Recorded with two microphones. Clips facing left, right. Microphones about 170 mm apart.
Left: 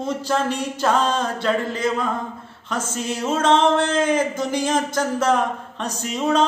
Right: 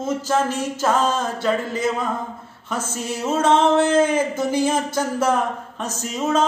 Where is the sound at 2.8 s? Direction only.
55° right (ahead or behind).